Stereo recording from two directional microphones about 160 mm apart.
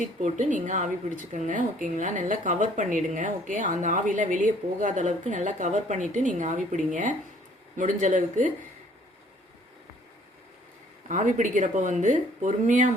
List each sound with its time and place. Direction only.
0.0 s speech: 50° right (ahead or behind)
11.1 s speech: 50° right (ahead or behind)